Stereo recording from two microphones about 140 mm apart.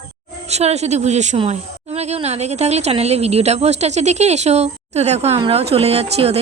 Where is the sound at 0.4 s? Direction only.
50° right (ahead or behind).